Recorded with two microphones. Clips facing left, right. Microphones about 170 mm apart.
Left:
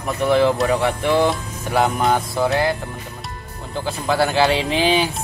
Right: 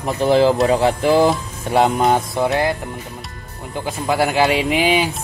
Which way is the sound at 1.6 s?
20° right (ahead or behind).